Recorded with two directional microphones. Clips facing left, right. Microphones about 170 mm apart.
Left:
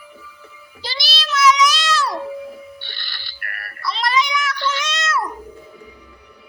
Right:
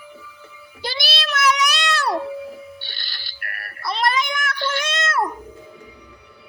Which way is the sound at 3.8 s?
55° right (ahead or behind).